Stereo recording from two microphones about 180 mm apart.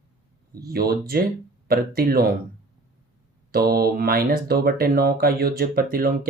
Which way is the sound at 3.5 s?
55° right (ahead or behind).